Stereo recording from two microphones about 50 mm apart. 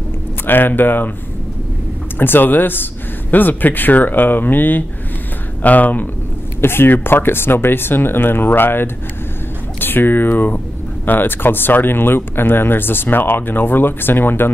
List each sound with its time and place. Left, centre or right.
0.5 s speech: left
2.1 s speech: left
6.6 s speech: left